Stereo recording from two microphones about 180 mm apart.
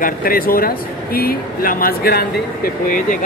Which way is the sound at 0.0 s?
55° left (ahead or behind).